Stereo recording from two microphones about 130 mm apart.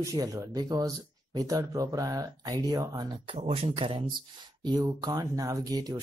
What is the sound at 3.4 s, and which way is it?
Speech, 50° right (ahead or behind).